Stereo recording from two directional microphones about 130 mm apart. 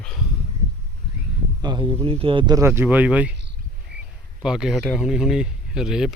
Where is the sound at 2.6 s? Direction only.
20° right (ahead or behind).